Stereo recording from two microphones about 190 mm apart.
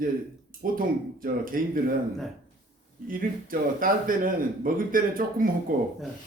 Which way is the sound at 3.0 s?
45° right (ahead or behind).